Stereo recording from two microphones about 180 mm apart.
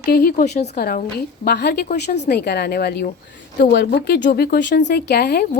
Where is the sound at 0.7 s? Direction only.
55° left (ahead or behind).